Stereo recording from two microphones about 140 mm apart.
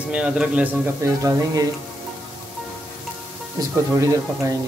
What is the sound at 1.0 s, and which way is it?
Speech, 20° right (ahead or behind).